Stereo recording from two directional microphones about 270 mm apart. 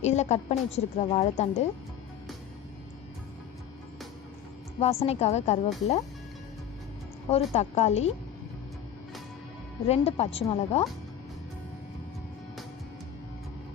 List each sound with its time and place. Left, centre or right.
0.0 s a woman's voice: left
4.8 s a woman's voice: left
7.3 s a woman's voice: left
9.8 s a woman's voice: left